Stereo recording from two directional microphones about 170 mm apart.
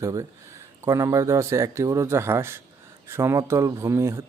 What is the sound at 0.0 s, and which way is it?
Speech, 20° right (ahead or behind).